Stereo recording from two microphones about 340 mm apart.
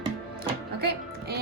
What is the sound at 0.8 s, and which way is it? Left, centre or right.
Music, right.